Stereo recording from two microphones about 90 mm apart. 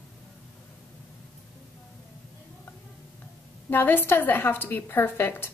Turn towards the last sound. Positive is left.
turn(degrees=25)  # may be behind; listen again after turning